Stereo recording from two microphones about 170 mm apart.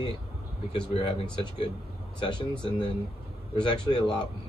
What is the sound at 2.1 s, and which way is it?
Speech, 30° left (ahead or behind).